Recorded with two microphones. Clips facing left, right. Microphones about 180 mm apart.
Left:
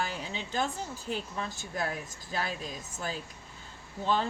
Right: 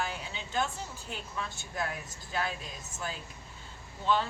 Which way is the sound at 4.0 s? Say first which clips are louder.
Even; 40° left (ahead or behind).